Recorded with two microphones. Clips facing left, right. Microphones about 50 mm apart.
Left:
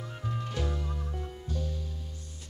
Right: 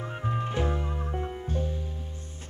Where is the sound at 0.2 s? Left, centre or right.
Right.